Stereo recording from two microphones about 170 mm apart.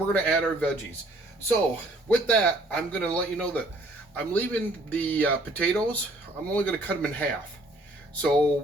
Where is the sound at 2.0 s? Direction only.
5° left (ahead or behind).